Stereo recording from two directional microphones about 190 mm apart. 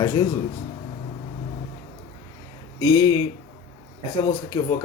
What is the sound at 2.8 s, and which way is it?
Speech, 20° left (ahead or behind).